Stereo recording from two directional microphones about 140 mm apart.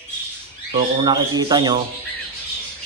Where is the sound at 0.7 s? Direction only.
40° right (ahead or behind).